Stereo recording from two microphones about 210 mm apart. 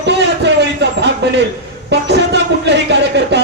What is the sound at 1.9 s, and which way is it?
Speech, 55° right (ahead or behind).